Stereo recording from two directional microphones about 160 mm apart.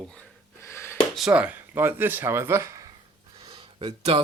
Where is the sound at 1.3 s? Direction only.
10° right (ahead or behind).